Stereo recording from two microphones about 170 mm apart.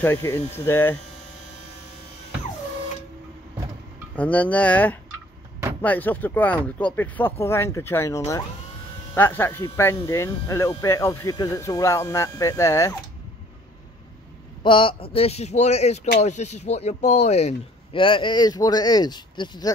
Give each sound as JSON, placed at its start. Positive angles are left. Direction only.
{"t": 0.0, "sound": "speech", "side_deg": 15}
{"t": 4.1, "sound": "speech", "side_deg": 10}
{"t": 14.6, "sound": "speech", "side_deg": 30}